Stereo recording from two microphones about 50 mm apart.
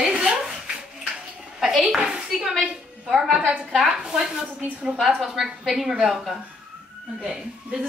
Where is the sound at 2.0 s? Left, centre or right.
Centre.